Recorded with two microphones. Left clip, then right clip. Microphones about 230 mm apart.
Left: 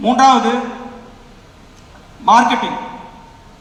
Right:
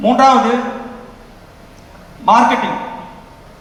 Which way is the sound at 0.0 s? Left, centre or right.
Left.